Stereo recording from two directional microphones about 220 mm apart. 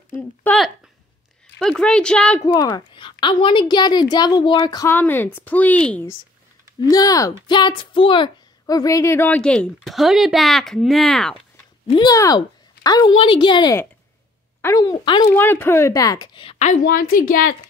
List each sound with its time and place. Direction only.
0.1 s a woman's voice: 5° left (ahead or behind)
2.4 s a woman's voice: 15° left (ahead or behind)
6.8 s a woman's voice: 15° left (ahead or behind); by 11.3 s centre (ahead or behind)
11.9 s a woman's voice: 15° left (ahead or behind); by 17.6 s 40° left (ahead or behind)